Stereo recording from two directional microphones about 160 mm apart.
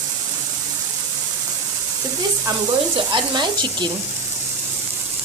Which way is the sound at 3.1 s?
30° right (ahead or behind).